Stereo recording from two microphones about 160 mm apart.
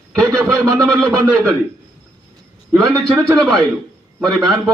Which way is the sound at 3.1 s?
Centre (ahead or behind).